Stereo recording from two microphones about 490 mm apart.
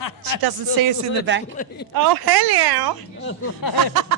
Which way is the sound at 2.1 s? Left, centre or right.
Right.